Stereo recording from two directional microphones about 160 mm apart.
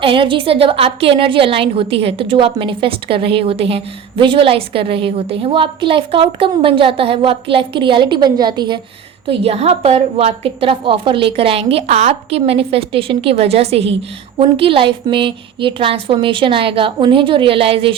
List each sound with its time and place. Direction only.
0.0 s a woman's voice: 35° right (ahead or behind)